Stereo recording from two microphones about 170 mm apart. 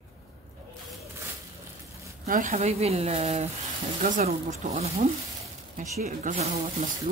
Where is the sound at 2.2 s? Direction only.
55° right (ahead or behind); by 5.0 s 35° right (ahead or behind).